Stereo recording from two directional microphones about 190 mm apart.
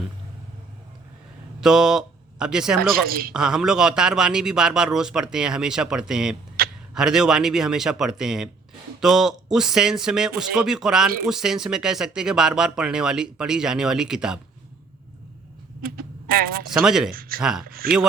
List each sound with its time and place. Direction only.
1.6 s speech: 5° right (ahead or behind)
3.1 s speech: 50° right (ahead or behind)
3.3 s speech: 5° right (ahead or behind)
6.6 s a sound: 50° right (ahead or behind)
6.9 s speech: 5° right (ahead or behind)
15.8 s speech: 50° right (ahead or behind)
16.7 s speech: 5° right (ahead or behind)
17.1 s speech: 50° right (ahead or behind)
17.4 s speech: 5° right (ahead or behind)
17.7 s speech: 50° right (ahead or behind)